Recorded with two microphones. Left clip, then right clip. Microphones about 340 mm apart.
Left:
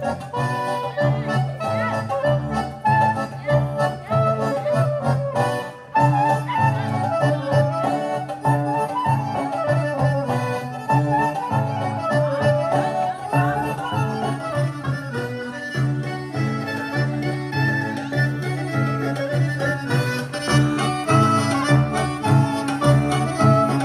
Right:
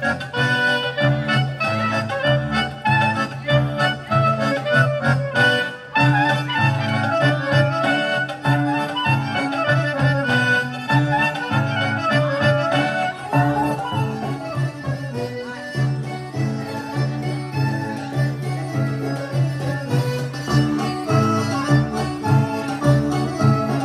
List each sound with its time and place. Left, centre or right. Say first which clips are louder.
0.4 s music: right 6 dB; centre
20.4 s music: left 1 dB; left